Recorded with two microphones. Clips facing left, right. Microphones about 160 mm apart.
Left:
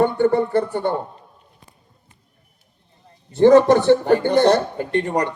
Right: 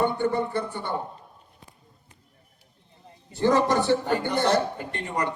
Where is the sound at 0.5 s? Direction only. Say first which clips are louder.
Left 10 dB; 55° left (ahead or behind).